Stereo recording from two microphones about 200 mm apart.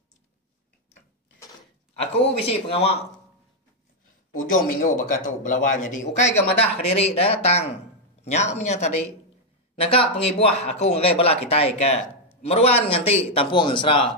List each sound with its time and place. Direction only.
2.0 s a man's voice: 30° left (ahead or behind)
4.3 s a man's voice: 45° left (ahead or behind); by 14.0 s 25° left (ahead or behind)